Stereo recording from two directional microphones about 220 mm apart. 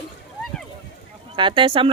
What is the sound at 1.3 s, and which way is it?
Speech, 20° right (ahead or behind).